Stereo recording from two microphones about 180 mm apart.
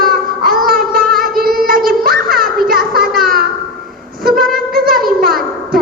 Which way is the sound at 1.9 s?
55° right (ahead or behind).